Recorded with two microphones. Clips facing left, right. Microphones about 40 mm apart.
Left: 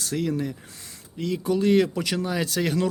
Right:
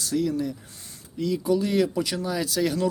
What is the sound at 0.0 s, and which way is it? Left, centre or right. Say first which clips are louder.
Speech: right 1 dB; left.